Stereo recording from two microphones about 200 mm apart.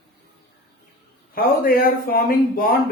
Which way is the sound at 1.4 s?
50° left (ahead or behind).